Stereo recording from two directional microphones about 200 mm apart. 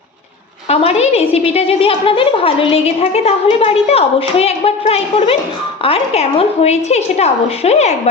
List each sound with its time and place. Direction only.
0.7 s a woman's voice: 30° left (ahead or behind)